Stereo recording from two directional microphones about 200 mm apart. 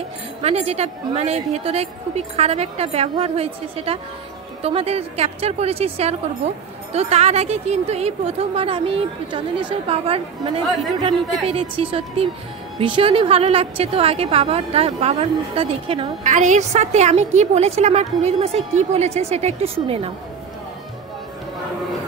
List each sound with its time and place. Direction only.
0.4 s a woman's voice: 30° right (ahead or behind)